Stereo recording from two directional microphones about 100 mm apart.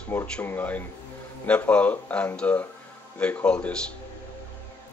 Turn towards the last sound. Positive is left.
turn(degrees=10)  # may be behind; listen again after turning